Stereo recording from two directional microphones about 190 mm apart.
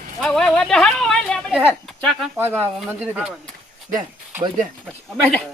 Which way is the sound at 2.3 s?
10° right (ahead or behind).